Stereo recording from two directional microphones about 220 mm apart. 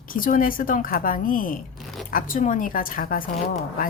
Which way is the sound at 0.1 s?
40° left (ahead or behind).